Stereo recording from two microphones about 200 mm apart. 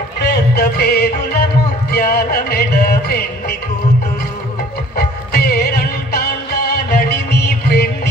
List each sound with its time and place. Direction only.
0.2 s music: 55° left (ahead or behind)
4.9 s music: 50° left (ahead or behind)